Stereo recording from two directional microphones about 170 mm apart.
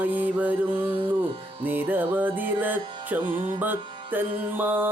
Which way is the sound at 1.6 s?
10° right (ahead or behind).